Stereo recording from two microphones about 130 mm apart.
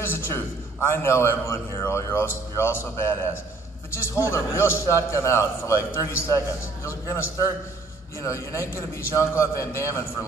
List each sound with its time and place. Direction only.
0.0 s a man's voice: 15° left (ahead or behind)